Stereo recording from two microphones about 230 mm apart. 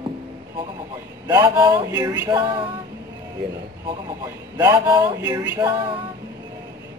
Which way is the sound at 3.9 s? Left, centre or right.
Centre.